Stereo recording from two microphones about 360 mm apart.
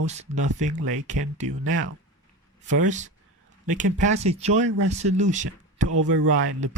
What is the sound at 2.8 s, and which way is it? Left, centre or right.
Speech, centre.